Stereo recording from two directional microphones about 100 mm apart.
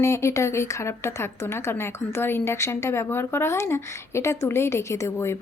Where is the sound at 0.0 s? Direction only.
30° left (ahead or behind).